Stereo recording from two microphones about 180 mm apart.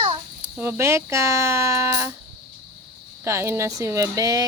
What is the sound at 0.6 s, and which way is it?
Speech, 15° right (ahead or behind).